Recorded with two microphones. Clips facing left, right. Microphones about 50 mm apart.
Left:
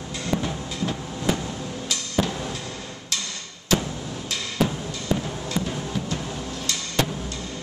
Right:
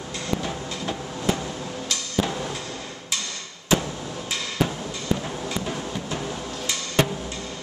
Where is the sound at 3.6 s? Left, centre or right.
Centre.